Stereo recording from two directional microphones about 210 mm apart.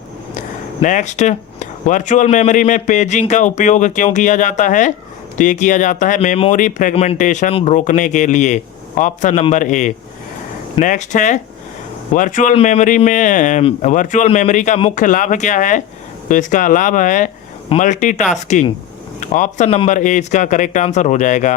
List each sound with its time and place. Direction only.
0.3 s speech: 35° left (ahead or behind)